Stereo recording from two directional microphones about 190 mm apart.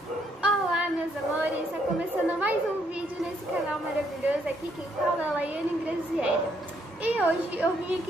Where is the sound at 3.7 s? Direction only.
5° right (ahead or behind).